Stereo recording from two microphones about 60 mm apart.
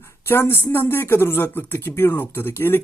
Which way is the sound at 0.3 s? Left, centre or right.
Left.